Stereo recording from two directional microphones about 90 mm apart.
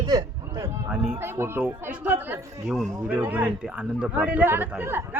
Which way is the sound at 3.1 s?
20° right (ahead or behind).